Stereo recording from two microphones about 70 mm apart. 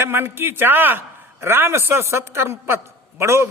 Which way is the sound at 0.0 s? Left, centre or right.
Right.